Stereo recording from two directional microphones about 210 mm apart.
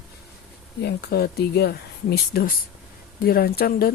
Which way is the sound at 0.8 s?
50° left (ahead or behind).